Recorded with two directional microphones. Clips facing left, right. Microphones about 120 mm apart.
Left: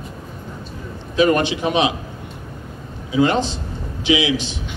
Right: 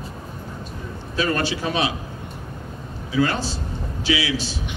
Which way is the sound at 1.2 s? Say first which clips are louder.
Left 7 dB; 20° left (ahead or behind).